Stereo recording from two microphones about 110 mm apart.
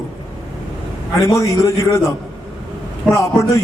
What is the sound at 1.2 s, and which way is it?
Speech, 30° left (ahead or behind).